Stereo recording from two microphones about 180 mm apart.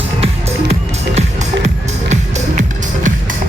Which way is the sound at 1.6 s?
40° right (ahead or behind).